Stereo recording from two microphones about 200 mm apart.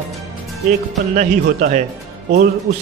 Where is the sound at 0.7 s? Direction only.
40° right (ahead or behind).